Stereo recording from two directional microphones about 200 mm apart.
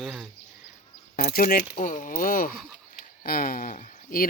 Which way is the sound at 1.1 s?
45° left (ahead or behind).